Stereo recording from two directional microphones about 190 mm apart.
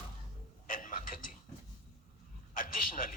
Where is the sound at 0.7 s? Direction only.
45° left (ahead or behind).